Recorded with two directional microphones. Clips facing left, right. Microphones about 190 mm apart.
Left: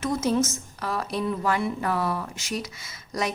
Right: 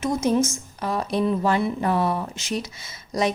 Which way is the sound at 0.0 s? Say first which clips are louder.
Right 3 dB; 15° right (ahead or behind).